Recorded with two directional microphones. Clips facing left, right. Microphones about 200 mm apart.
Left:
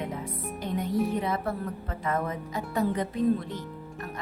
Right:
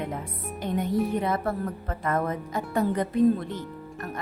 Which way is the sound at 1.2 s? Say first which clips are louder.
Right 3 dB; 50° right (ahead or behind).